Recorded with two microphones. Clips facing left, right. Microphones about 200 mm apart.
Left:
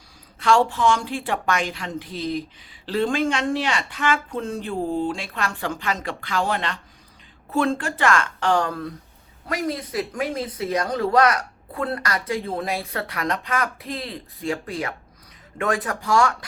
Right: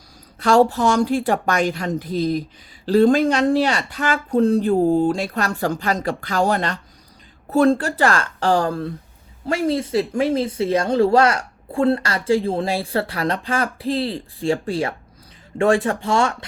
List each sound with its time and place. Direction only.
0.3 s speech: 40° right (ahead or behind)